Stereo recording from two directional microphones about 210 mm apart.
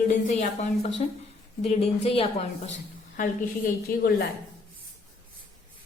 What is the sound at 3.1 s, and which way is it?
Speech, 45° left (ahead or behind).